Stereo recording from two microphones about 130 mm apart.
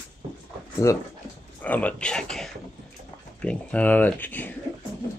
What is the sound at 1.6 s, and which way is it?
Speech, 10° left (ahead or behind).